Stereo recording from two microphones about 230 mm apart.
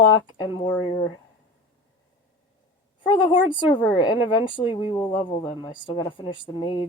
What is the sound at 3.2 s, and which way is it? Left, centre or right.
A woman's voice, left.